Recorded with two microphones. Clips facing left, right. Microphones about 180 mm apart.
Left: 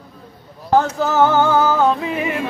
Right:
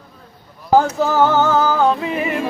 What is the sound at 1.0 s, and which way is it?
Music, 5° left (ahead or behind).